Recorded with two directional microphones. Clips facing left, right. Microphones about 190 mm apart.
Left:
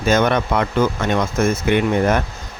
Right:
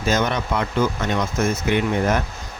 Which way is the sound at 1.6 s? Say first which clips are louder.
Left 4 dB; 60° left (ahead or behind).